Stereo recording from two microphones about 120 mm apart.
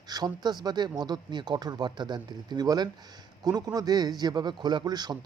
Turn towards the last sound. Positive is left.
turn(degrees=-35)  # may be behind; listen again after turning